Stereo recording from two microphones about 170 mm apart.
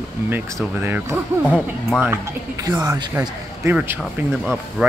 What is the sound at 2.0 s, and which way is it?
A man's voice, 20° right (ahead or behind).